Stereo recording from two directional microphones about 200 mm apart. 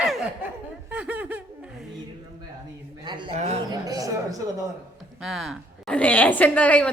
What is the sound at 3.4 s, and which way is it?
Speech, 35° right (ahead or behind).